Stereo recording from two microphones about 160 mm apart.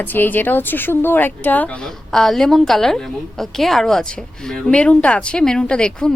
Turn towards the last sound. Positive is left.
turn(degrees=5)  # may be behind; listen again after turning